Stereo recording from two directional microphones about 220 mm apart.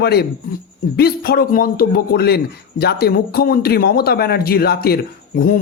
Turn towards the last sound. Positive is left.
turn(degrees=40)  # may be behind; listen again after turning